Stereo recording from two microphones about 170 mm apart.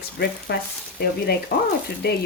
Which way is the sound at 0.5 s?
70° left (ahead or behind).